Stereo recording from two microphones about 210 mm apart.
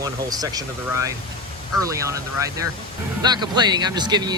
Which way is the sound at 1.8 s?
15° right (ahead or behind).